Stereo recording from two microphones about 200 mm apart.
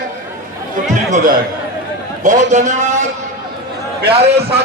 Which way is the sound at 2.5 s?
35° right (ahead or behind).